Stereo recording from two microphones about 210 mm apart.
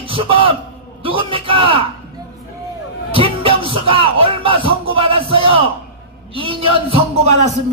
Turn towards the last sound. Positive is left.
turn(degrees=-30)  # may be behind; listen again after turning